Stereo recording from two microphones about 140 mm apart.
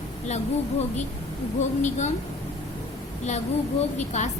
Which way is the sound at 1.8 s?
55° left (ahead or behind).